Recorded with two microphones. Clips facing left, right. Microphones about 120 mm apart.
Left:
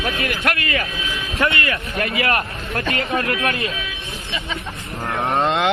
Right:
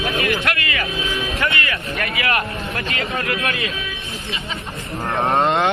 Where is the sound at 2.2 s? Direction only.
40° left (ahead or behind).